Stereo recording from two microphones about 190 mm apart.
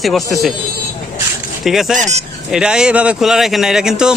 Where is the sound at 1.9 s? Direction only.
40° right (ahead or behind).